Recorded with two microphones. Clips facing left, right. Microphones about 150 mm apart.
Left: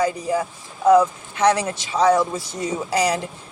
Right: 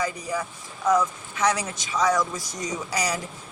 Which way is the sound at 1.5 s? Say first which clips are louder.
Left 6 dB; 65° left (ahead or behind).